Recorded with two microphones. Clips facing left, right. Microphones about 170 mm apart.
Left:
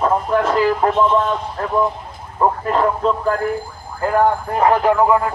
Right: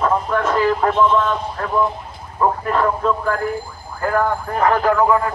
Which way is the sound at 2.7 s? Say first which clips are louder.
Left 1 dB; 30° left (ahead or behind).